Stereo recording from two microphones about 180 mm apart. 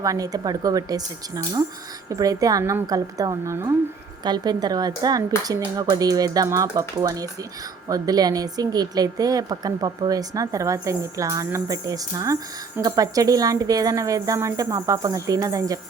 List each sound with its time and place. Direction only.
0.0 s a woman's voice: 20° right (ahead or behind)